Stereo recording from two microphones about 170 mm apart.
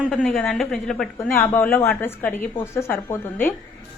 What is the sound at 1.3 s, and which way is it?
A woman's voice, 15° left (ahead or behind).